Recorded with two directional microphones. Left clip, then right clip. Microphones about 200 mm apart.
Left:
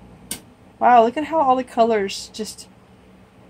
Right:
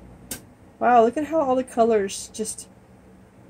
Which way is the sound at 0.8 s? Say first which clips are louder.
Left 3 dB; 35° left (ahead or behind).